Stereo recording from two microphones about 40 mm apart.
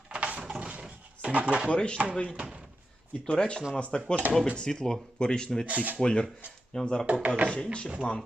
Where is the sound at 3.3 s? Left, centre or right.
Left.